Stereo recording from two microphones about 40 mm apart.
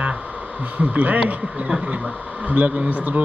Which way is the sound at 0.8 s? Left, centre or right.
Right.